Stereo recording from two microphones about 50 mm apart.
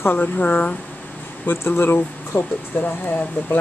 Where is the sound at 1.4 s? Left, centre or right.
Left.